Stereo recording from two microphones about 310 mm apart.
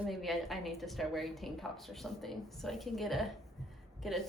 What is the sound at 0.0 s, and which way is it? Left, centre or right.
A woman's voice, centre.